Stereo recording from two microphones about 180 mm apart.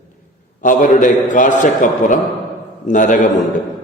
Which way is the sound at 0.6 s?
45° left (ahead or behind).